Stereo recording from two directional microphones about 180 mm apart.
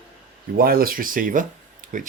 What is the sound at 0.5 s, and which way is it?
Speech, 55° right (ahead or behind).